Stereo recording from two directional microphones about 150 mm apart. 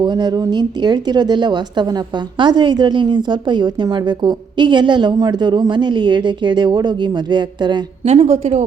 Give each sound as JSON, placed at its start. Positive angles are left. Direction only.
{"t": 0.0, "sound": "speech", "side_deg": -30}
{"t": 8.0, "sound": "a woman's voice", "side_deg": -40}